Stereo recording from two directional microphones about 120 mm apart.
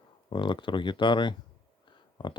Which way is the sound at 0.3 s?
40° left (ahead or behind).